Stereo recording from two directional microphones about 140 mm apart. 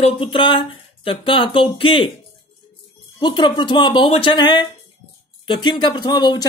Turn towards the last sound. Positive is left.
turn(degrees=30)  # may be behind; listen again after turning